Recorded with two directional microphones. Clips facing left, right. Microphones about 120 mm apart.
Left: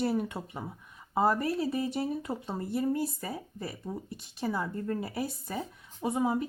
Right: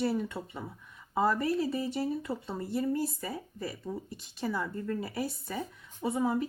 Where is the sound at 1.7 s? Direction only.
20° left (ahead or behind).